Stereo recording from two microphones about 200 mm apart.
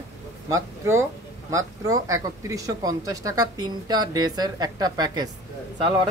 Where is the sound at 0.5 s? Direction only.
15° right (ahead or behind).